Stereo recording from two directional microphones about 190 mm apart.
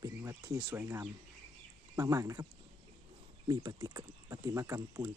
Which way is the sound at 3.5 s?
20° right (ahead or behind).